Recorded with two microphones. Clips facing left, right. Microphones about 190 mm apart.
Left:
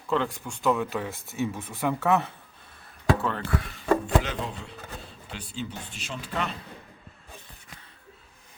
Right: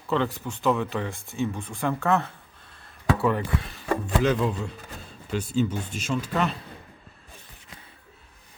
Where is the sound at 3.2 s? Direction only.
10° right (ahead or behind).